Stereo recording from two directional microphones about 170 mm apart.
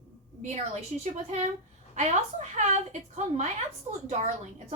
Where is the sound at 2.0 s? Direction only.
40° right (ahead or behind).